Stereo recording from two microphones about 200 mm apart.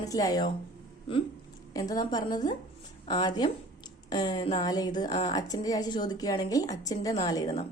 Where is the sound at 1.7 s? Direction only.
20° left (ahead or behind).